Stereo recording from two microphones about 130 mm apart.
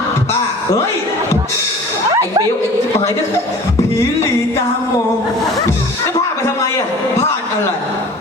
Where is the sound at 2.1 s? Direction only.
30° right (ahead or behind).